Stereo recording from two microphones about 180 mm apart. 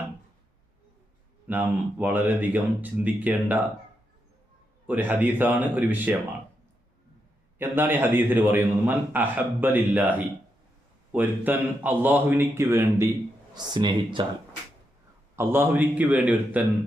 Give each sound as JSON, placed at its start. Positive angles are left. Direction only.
{"t": 1.5, "sound": "a man's voice", "side_deg": -10}
{"t": 4.9, "sound": "a man's voice", "side_deg": -10}
{"t": 7.6, "sound": "a man's voice", "side_deg": -10}
{"t": 13.5, "sound": "speech", "side_deg": -25}
{"t": 15.4, "sound": "a man's voice", "side_deg": -10}